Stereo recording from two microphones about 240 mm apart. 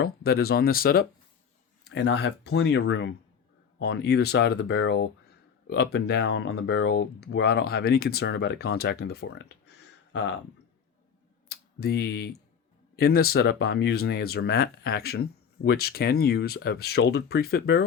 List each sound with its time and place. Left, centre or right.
0.0 s speech: left
11.4 s speech: left